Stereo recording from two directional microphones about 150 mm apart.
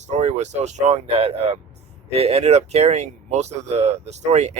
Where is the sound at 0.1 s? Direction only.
45° right (ahead or behind).